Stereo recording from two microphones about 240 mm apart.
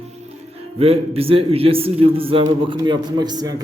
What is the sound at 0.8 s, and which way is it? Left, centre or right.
A man's voice, right.